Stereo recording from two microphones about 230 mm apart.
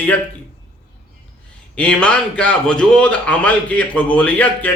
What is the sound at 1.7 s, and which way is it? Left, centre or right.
A man's voice, centre.